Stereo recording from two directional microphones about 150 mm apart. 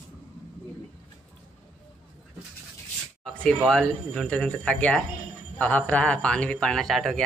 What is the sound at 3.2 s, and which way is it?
Speech, 5° left (ahead or behind).